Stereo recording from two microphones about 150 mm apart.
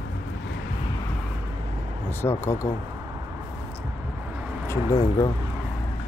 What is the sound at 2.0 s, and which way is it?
Speech, 15° left (ahead or behind).